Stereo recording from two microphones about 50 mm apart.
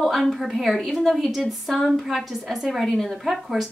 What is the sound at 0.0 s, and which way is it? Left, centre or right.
A woman's voice, centre.